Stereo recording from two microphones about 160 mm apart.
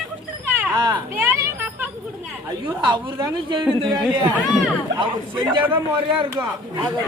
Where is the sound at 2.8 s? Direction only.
30° right (ahead or behind).